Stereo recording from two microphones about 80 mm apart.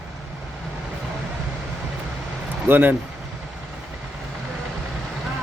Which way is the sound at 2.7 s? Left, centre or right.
Right.